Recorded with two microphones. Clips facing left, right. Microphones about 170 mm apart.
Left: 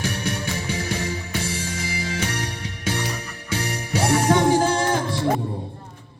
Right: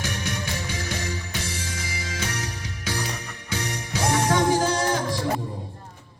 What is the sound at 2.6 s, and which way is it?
Music, 30° left (ahead or behind).